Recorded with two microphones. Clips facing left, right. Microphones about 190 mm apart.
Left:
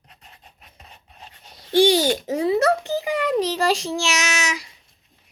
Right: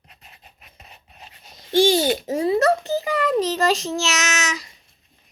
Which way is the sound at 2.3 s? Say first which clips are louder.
Right 1 dB; 15° left (ahead or behind).